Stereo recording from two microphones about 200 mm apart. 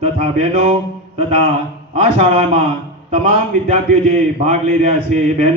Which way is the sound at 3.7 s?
30° right (ahead or behind).